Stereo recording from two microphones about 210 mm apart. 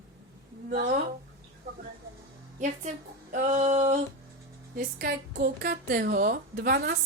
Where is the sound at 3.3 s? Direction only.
35° right (ahead or behind).